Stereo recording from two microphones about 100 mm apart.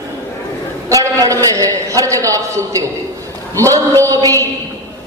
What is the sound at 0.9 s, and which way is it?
A man's voice, 35° right (ahead or behind).